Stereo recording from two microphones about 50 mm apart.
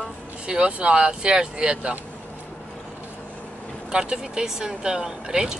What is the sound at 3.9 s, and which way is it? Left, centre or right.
Speech, centre.